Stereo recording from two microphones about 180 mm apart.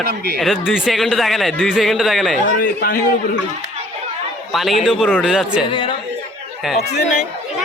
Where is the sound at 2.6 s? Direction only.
50° left (ahead or behind).